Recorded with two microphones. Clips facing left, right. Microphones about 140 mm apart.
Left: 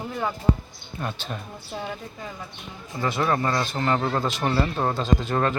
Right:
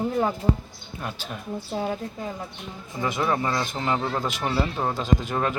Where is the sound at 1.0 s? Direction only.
5° right (ahead or behind).